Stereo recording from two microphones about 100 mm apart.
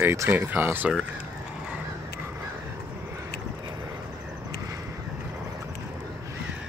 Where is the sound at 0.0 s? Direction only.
25° right (ahead or behind).